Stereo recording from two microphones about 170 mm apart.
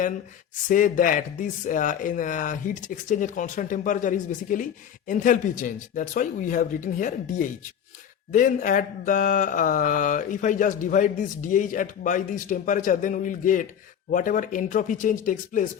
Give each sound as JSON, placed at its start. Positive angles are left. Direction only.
{"t": 0.7, "sound": "speech", "side_deg": 50}